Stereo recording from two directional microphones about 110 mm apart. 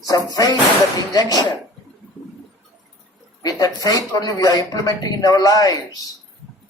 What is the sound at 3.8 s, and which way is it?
Speech, 35° left (ahead or behind).